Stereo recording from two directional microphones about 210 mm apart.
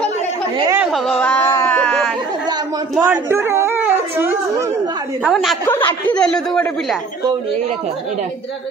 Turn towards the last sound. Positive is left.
turn(degrees=5)  # may be behind; listen again after turning